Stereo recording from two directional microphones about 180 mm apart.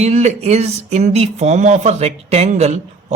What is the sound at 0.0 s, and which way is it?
Speech, 40° right (ahead or behind).